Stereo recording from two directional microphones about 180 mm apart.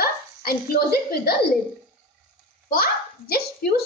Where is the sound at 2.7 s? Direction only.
55° left (ahead or behind).